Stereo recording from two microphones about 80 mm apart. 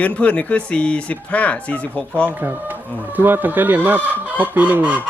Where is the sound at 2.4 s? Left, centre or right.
Right.